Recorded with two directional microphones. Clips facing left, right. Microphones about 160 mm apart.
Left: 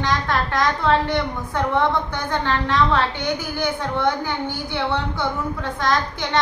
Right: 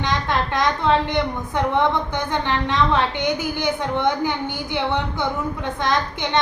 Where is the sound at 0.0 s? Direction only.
20° right (ahead or behind).